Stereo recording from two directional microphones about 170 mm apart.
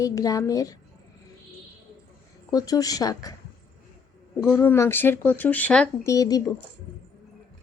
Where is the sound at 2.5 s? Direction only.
20° left (ahead or behind).